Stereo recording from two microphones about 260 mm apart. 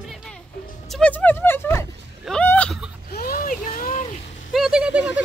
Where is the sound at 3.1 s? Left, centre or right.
Left.